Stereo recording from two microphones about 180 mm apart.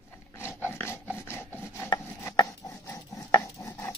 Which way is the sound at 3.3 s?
15° left (ahead or behind).